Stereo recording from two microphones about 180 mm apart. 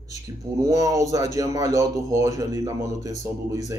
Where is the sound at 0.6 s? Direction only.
20° right (ahead or behind).